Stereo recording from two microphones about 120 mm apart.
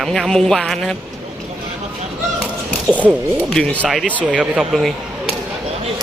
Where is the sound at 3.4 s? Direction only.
5° left (ahead or behind).